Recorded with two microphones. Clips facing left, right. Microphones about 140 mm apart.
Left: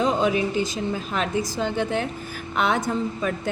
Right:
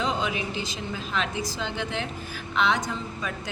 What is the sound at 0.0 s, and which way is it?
A woman's voice, 45° left (ahead or behind).